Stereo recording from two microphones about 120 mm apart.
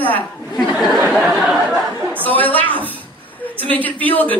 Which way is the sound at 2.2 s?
15° left (ahead or behind).